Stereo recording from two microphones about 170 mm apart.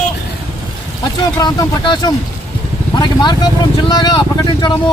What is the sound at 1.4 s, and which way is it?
Speech, 25° left (ahead or behind).